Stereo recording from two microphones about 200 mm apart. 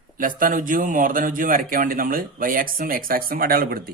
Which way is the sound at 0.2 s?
45° right (ahead or behind).